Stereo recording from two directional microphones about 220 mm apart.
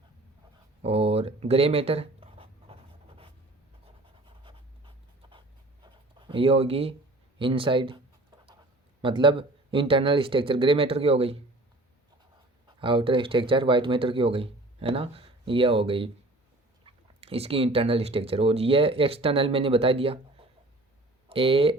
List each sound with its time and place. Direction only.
0.8 s speech: 25° right (ahead or behind)
4.4 s writing: 20° right (ahead or behind)
7.3 s speech: 25° right (ahead or behind)
12.6 s speech: 20° right (ahead or behind)
21.2 s speech: 25° right (ahead or behind)